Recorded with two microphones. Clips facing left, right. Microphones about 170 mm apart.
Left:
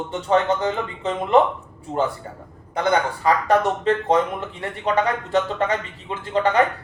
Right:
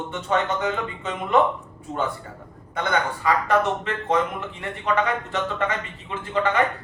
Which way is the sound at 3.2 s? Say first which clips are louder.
Left 2 dB; 35° left (ahead or behind).